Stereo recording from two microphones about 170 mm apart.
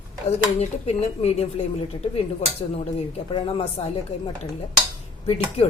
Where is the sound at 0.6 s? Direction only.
40° left (ahead or behind).